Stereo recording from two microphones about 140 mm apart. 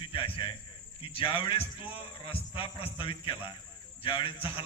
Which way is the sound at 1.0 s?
40° left (ahead or behind).